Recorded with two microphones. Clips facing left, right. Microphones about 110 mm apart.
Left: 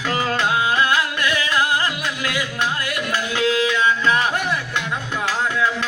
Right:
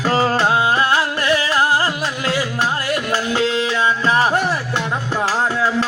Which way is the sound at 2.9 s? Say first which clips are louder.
Right 4 dB; 30° right (ahead or behind).